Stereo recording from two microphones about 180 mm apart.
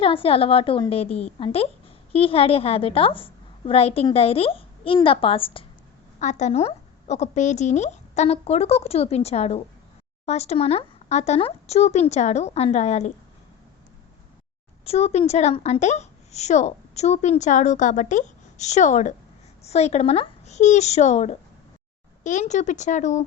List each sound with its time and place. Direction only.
0.0 s a woman's voice: 30° left (ahead or behind)
6.1 s a woman's voice: 40° left (ahead or behind)
14.8 s a woman's voice: 35° left (ahead or behind)